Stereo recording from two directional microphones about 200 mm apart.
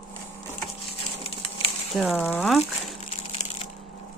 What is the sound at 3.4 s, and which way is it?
Crushing, 35° left (ahead or behind).